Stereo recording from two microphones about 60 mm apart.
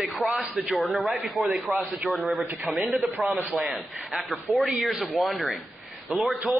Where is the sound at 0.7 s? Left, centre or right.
Centre.